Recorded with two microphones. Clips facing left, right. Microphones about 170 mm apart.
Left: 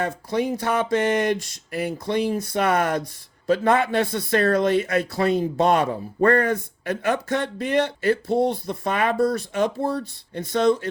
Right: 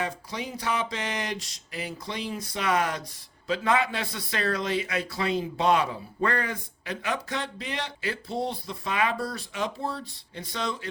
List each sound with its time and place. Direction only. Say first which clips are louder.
0.0 s speech: left 9 dB; 55° left (ahead or behind)